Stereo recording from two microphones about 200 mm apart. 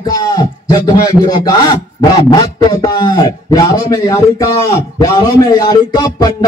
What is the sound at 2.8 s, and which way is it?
A man's voice, 20° left (ahead or behind).